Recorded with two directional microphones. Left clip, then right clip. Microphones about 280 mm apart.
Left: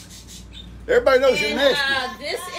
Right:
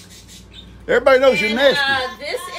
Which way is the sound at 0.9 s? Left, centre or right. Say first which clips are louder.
Right 3 dB; right.